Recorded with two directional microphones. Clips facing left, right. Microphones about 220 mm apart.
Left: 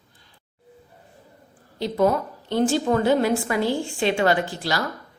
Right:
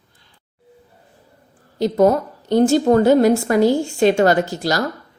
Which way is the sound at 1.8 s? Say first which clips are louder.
Right 6 dB; 45° right (ahead or behind).